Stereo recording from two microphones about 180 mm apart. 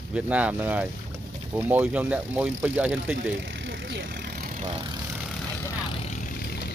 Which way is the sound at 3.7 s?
70° right (ahead or behind).